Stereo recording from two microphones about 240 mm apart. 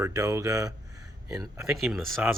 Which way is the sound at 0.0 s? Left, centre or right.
Centre.